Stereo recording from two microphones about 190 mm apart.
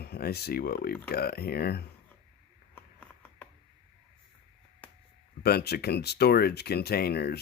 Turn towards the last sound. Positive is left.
turn(degrees=55)  # may be behind; listen again after turning